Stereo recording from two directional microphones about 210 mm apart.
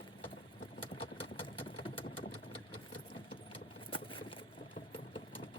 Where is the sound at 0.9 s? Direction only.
25° left (ahead or behind).